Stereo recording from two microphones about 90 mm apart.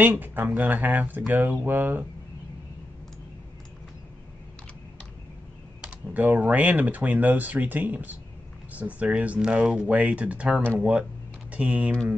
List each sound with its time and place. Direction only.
0.0 s speech: 20° right (ahead or behind)
5.8 s speech: 15° right (ahead or behind)